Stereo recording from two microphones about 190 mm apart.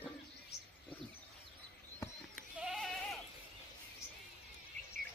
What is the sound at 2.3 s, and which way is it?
Sheep, centre (ahead or behind).